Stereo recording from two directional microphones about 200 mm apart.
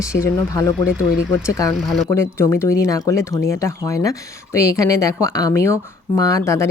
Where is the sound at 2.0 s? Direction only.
15° left (ahead or behind).